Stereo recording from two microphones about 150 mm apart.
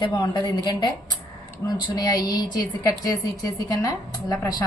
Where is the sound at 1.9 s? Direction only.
25° left (ahead or behind).